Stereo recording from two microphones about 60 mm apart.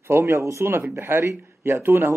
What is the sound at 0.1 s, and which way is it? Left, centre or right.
A man's voice, right.